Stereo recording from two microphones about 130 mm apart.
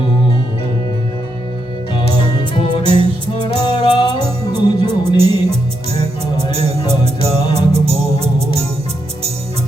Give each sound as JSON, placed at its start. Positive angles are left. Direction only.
{"t": 2.3, "sound": "music", "side_deg": 35}
{"t": 2.8, "sound": "music", "side_deg": -45}
{"t": 3.3, "sound": "music", "side_deg": 35}
{"t": 4.2, "sound": "music", "side_deg": -50}